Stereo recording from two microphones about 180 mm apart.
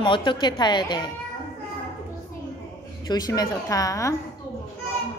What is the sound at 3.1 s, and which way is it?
A woman's voice, 20° left (ahead or behind).